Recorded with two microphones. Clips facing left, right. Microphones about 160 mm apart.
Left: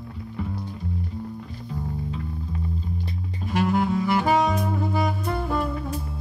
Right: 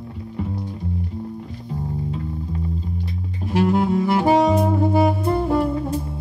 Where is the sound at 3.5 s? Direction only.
35° right (ahead or behind).